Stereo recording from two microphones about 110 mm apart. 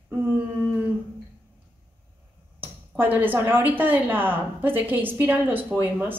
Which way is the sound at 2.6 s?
20° right (ahead or behind).